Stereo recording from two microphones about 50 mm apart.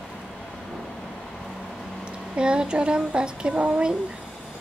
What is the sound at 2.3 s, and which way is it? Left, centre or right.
Speech, centre.